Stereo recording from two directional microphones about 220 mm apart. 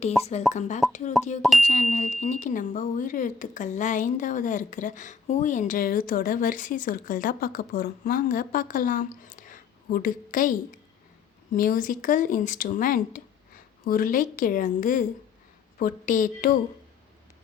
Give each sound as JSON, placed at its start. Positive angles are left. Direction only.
{"t": 0.2, "sound": "speech", "side_deg": 30}
{"t": 0.8, "sound": "speech", "side_deg": 0}
{"t": 1.6, "sound": "speech", "side_deg": 30}